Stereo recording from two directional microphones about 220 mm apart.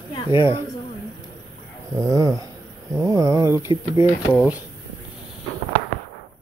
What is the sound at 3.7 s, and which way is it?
Speech, 25° left (ahead or behind).